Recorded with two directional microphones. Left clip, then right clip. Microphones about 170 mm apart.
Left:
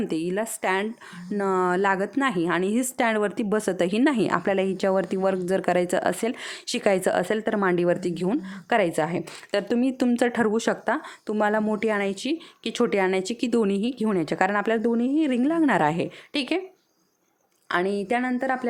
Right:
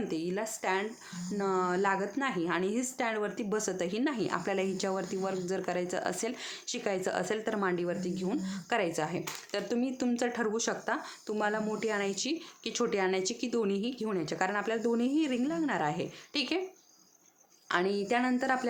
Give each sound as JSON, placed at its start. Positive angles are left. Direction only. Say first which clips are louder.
{"t": 0.1, "sound": "a woman's voice", "louder": "left 7 dB", "side_deg": 50}
{"t": 17.7, "sound": "speech", "louder": "left 5 dB", "side_deg": 45}